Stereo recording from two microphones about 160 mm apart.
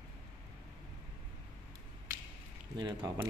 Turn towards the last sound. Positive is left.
turn(degrees=-25)  # may be behind; listen again after turning